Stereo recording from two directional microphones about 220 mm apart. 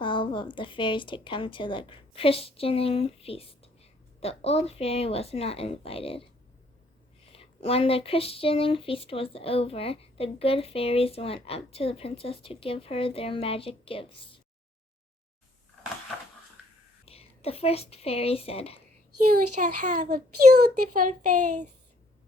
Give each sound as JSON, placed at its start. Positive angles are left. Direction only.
{"t": 0.0, "sound": "speech", "side_deg": 20}
{"t": 7.3, "sound": "speech", "side_deg": 25}
{"t": 17.1, "sound": "a woman's voice", "side_deg": 25}
{"t": 19.3, "sound": "a child's voice", "side_deg": -35}